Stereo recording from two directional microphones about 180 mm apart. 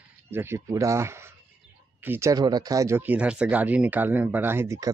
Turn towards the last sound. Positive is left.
turn(degrees=-15)  # may be behind; listen again after turning